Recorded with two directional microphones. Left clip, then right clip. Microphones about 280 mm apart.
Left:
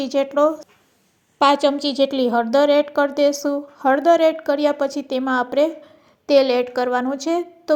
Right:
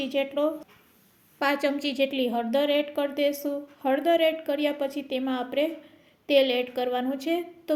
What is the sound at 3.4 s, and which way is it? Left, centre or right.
Speech, left.